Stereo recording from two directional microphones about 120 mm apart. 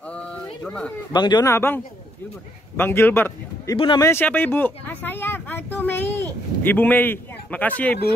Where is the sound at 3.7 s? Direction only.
40° left (ahead or behind).